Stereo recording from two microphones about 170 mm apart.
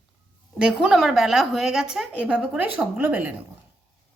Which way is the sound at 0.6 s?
5° right (ahead or behind).